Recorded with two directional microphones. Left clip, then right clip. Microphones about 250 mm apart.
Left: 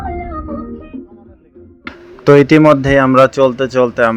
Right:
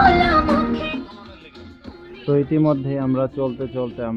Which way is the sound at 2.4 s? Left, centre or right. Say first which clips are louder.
Left 10 dB; centre.